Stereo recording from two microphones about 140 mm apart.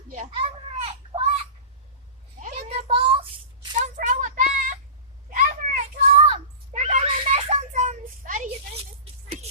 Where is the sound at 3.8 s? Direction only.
60° right (ahead or behind).